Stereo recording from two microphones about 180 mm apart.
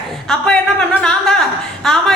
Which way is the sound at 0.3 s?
5° left (ahead or behind).